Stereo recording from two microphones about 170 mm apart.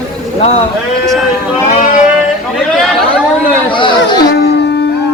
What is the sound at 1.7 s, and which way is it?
Sheep, 55° left (ahead or behind).